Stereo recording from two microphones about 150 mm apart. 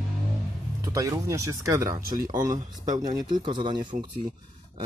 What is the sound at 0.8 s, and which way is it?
Speech, 20° right (ahead or behind).